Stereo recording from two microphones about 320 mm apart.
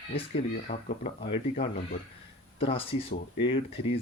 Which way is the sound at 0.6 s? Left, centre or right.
Centre.